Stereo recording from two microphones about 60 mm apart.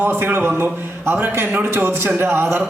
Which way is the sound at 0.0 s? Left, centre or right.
Right.